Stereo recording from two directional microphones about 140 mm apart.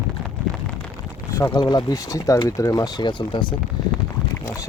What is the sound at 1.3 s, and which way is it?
Speech, 20° left (ahead or behind).